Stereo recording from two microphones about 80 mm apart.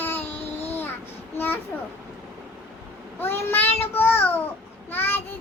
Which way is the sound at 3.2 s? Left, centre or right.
Left.